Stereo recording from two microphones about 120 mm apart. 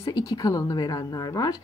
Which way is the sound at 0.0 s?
30° left (ahead or behind).